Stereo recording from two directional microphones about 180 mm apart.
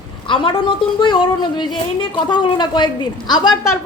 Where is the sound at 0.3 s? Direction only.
25° left (ahead or behind).